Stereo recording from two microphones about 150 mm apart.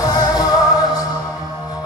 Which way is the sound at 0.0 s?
25° left (ahead or behind).